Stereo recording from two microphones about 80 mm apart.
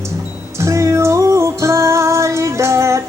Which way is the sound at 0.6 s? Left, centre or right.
Right.